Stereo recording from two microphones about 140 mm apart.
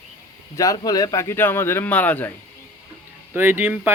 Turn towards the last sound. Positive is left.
turn(degrees=-15)  # may be behind; listen again after turning